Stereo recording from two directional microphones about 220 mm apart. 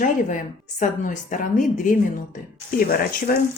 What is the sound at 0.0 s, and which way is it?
Speech, 35° left (ahead or behind).